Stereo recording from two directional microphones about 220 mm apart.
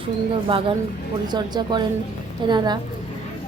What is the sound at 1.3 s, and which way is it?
Speech, 20° right (ahead or behind).